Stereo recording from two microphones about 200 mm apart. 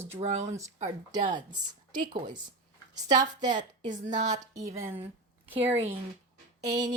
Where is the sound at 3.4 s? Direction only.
40° right (ahead or behind).